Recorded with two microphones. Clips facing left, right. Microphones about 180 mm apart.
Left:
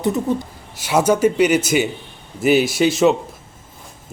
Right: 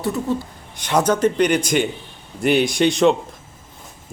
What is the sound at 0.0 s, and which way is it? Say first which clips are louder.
Speech: left 3 dB; 20° left (ahead or behind).